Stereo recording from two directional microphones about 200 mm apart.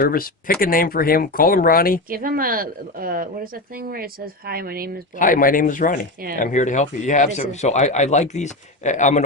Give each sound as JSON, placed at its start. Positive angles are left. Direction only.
{"t": 0.0, "sound": "speech", "side_deg": 45}
{"t": 2.0, "sound": "a woman's voice", "side_deg": -45}
{"t": 5.2, "sound": "speech", "side_deg": 45}